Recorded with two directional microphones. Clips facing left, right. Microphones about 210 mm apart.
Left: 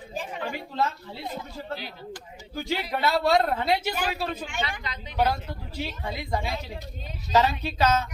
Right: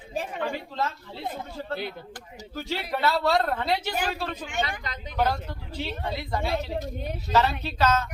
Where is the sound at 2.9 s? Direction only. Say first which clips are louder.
Left 1 dB; 10° left (ahead or behind).